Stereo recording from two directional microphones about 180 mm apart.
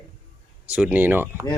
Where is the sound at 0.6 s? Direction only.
5° right (ahead or behind).